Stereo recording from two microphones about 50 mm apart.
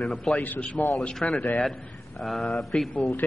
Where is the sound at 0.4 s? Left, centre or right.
Left.